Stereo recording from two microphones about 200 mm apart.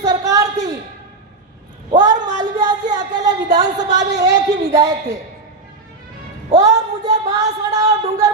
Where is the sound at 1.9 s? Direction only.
20° right (ahead or behind).